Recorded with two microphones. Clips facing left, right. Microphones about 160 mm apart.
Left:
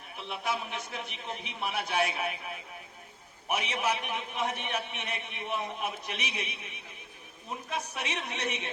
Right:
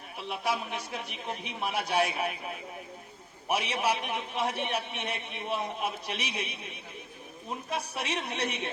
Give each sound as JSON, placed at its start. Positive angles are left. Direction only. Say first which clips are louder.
{"t": 0.3, "sound": "a man's voice", "louder": "right 2 dB", "side_deg": -40}
{"t": 3.5, "sound": "a man's voice", "louder": "right 2 dB", "side_deg": -35}